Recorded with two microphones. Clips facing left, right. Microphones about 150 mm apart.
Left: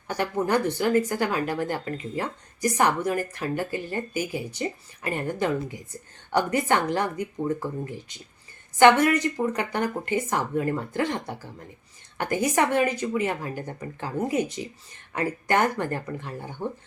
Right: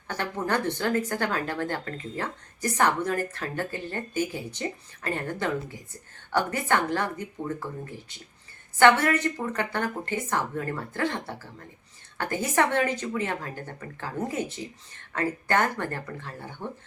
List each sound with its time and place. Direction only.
0.1 s speech: 10° left (ahead or behind)